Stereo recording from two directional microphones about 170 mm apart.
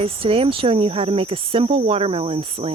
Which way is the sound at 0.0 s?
35° right (ahead or behind).